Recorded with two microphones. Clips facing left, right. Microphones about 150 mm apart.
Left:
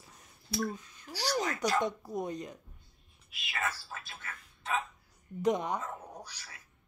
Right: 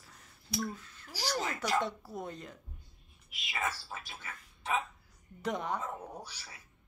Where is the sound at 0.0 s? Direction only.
20° left (ahead or behind).